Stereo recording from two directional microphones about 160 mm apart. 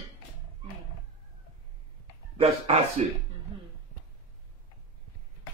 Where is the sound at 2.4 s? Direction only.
40° right (ahead or behind).